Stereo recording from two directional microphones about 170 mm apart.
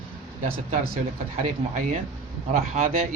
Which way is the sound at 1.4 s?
45° right (ahead or behind).